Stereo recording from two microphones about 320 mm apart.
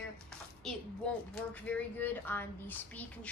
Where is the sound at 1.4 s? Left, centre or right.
Centre.